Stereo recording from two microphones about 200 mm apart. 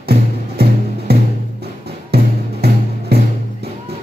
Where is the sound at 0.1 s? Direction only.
50° right (ahead or behind).